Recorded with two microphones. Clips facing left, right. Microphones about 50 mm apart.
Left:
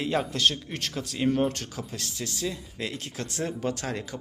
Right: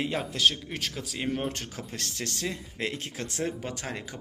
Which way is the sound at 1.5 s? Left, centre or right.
Right.